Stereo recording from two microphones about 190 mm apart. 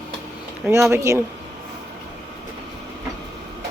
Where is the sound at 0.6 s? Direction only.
15° right (ahead or behind).